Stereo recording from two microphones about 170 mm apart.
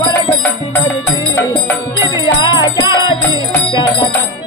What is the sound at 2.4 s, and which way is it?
Music, 25° left (ahead or behind).